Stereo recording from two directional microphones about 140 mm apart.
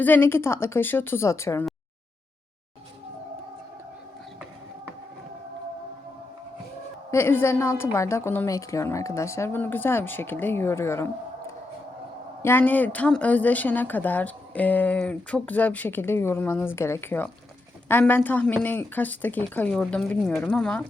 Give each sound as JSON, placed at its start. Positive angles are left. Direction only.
{"t": 0.0, "sound": "a woman's voice", "side_deg": 15}
{"t": 7.1, "sound": "a woman's voice", "side_deg": 15}
{"t": 12.4, "sound": "a woman's voice", "side_deg": 15}